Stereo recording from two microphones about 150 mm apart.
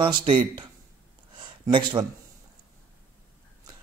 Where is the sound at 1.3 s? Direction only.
30° right (ahead or behind).